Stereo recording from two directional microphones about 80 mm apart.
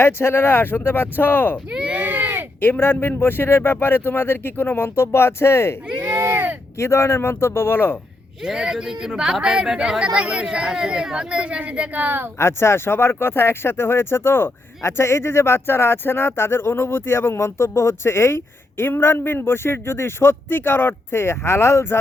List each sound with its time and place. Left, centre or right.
0.0 s speech: left
1.7 s speech: centre
2.0 s a sound: right
2.6 s speech: left
6.0 s a sound: right
6.7 s speech: left
8.4 s speech: centre; by 12.3 s right
12.4 s speech: left